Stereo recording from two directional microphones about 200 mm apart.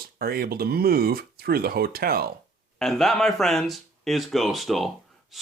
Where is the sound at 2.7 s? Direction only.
Centre (ahead or behind).